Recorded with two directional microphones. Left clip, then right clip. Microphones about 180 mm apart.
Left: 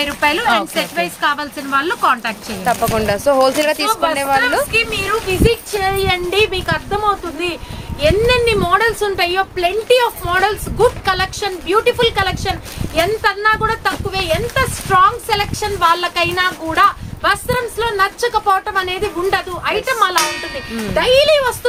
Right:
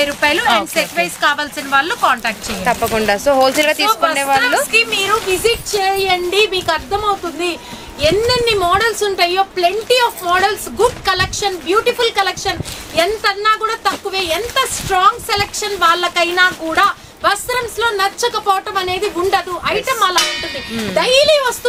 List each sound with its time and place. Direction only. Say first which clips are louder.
0.0 s speech: right 1 dB; 10° left (ahead or behind)
0.9 s speech: right 2 dB; centre (ahead or behind); by 2.3 s 20° right (ahead or behind)
2.6 s speech: right 1 dB; 5° right (ahead or behind)